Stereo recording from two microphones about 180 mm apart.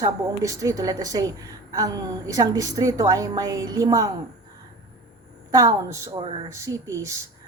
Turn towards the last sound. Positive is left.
turn(degrees=-15)  # may be behind; listen again after turning